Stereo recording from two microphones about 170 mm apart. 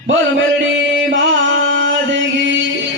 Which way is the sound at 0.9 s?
90° right.